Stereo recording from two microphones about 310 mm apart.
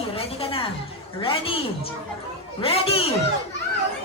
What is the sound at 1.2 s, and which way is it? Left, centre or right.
A woman's voice, centre.